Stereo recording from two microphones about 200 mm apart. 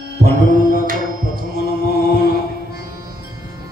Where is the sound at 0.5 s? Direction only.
45° right (ahead or behind).